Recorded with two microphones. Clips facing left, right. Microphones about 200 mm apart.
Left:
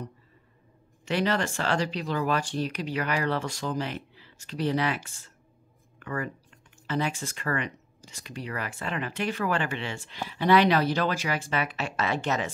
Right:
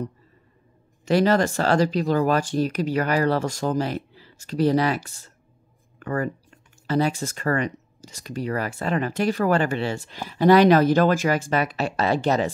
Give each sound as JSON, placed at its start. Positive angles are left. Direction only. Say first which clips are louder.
{"t": 1.0, "sound": "speech", "louder": "right 8 dB", "side_deg": -40}